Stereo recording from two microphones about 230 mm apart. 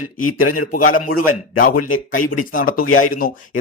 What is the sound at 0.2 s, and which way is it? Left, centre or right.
Speech, left.